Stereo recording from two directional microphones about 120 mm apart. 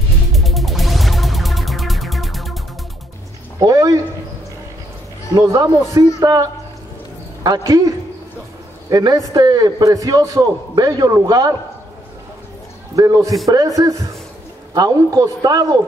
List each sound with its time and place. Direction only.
0.3 s music: centre (ahead or behind)
3.5 s speech: 30° right (ahead or behind)
5.4 s a man's voice: 30° right (ahead or behind)
7.4 s a man's voice: 30° right (ahead or behind)
8.9 s a man's voice: 30° right (ahead or behind)
12.9 s a man's voice: 30° right (ahead or behind)